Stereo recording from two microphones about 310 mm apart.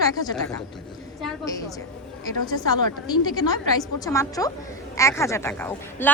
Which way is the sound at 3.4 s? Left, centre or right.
Centre.